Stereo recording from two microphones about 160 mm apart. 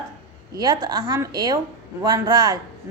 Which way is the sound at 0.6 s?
25° right (ahead or behind).